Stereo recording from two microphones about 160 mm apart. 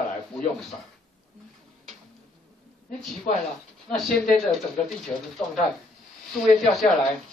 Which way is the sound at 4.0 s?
Centre (ahead or behind).